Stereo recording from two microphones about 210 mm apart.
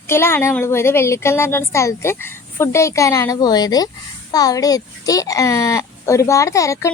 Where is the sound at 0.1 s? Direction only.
10° left (ahead or behind).